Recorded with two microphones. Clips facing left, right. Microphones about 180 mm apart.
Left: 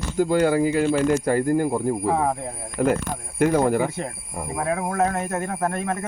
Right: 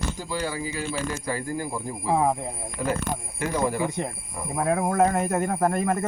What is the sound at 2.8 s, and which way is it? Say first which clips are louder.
Speech: left 6 dB; 60° left (ahead or behind).